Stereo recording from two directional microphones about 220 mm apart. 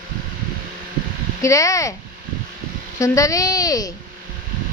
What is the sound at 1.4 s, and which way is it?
Speech, 15° left (ahead or behind).